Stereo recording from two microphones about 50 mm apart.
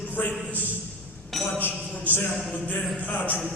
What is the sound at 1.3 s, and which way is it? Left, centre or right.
Speech, centre.